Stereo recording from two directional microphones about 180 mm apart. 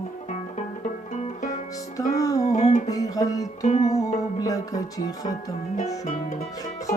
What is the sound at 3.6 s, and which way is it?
Music, 40° left (ahead or behind).